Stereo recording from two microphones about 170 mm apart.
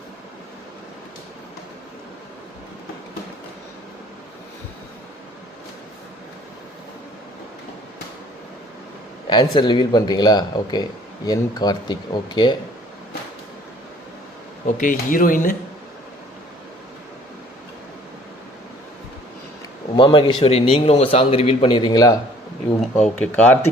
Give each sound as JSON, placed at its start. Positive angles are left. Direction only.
{"t": 9.3, "sound": "speech", "side_deg": 25}
{"t": 14.8, "sound": "speech", "side_deg": 50}
{"t": 20.0, "sound": "a man's voice", "side_deg": 30}
{"t": 23.0, "sound": "speech", "side_deg": 5}